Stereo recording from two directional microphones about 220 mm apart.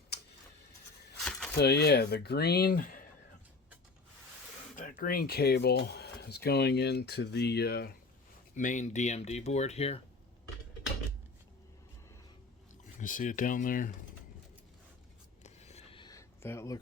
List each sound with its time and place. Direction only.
1.5 s speech: 50° left (ahead or behind)
4.8 s speech: 40° left (ahead or behind)
8.5 s speech: 35° left (ahead or behind)
13.0 s speech: 35° left (ahead or behind)
15.4 s a sound: 30° left (ahead or behind); by 16.8 s 15° left (ahead or behind)